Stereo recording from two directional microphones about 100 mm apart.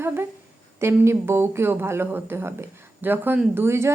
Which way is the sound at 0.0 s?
25° right (ahead or behind).